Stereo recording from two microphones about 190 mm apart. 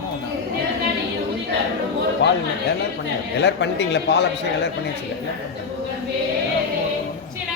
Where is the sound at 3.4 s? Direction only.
65° left (ahead or behind).